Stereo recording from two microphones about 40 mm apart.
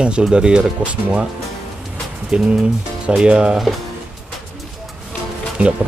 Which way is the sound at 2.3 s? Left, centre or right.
Centre.